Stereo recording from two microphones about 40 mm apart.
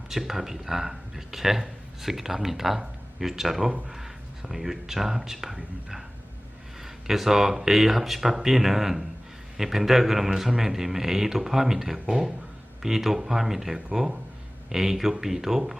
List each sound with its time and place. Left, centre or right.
0.1 s speech: centre
6.8 s speech: centre